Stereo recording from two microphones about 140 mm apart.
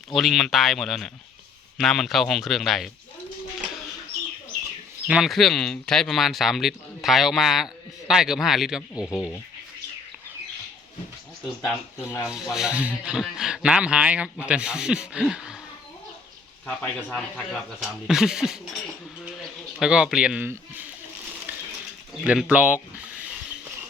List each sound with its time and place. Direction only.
0.1 s speech: centre (ahead or behind)
5.0 s speech: 5° right (ahead or behind)
9.0 s speech: 20° left (ahead or behind)
11.9 s speech: 20° left (ahead or behind)
12.3 s speech: 5° right (ahead or behind)
16.6 s speech: 10° left (ahead or behind)
19.8 s speech: 5° right (ahead or behind)
22.3 s speech: 10° right (ahead or behind)